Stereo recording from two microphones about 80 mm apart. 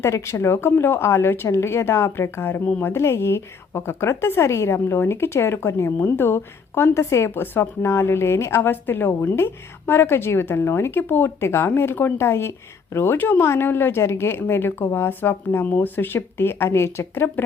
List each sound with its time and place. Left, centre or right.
0.0 s a woman's voice: left